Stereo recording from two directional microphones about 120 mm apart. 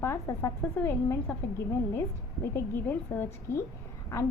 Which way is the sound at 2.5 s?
20° left (ahead or behind).